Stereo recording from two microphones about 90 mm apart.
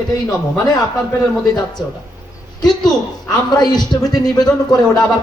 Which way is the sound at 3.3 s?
50° left (ahead or behind).